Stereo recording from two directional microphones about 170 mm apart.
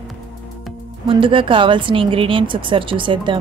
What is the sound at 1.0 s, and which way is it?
Speech, 30° right (ahead or behind).